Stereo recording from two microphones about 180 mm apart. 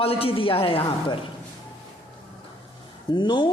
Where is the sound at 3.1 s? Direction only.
25° left (ahead or behind).